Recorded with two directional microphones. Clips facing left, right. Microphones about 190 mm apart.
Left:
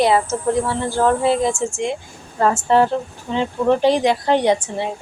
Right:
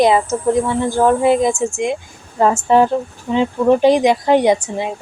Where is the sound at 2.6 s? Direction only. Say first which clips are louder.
Right 3 dB; 15° right (ahead or behind).